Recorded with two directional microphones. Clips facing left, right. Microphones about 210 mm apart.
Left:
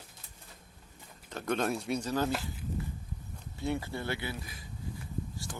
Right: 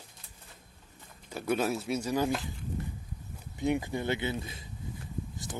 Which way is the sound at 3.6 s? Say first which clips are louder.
Right 4 dB; 15° right (ahead or behind).